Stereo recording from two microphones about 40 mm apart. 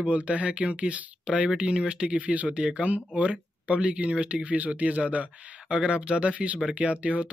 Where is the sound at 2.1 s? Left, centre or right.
Right.